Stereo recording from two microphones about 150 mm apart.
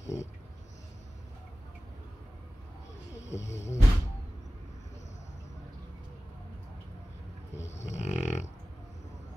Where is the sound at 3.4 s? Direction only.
20° left (ahead or behind).